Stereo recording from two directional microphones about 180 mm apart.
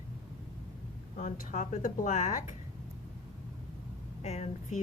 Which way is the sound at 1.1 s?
45° left (ahead or behind).